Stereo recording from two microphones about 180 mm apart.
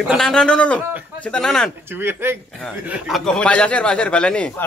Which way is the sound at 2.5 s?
Centre (ahead or behind).